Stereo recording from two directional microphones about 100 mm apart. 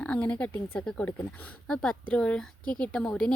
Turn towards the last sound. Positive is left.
turn(degrees=10)  # may be behind; listen again after turning